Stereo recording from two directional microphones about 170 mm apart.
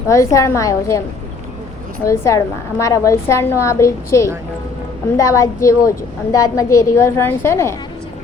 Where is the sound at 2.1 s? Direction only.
15° left (ahead or behind).